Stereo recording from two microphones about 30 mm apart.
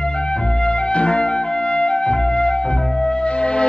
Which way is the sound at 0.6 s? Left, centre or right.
Left.